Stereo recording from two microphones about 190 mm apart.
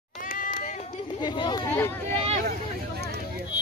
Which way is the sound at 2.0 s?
35° right (ahead or behind).